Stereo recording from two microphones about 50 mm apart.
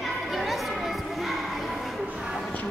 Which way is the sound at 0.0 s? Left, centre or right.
Centre.